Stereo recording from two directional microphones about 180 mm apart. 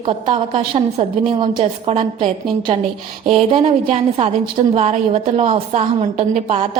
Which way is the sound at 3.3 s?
30° right (ahead or behind).